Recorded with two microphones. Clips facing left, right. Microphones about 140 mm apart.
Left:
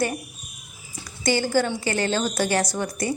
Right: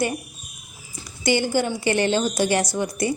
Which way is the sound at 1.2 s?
15° right (ahead or behind).